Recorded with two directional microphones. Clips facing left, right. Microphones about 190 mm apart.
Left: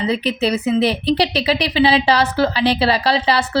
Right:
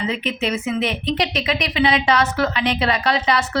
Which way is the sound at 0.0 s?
35° left (ahead or behind).